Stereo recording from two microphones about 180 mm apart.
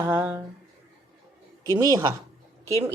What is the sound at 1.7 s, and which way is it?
Mantra, 20° right (ahead or behind).